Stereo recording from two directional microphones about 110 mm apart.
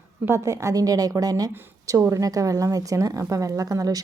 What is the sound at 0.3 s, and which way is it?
A woman's voice, 25° right (ahead or behind).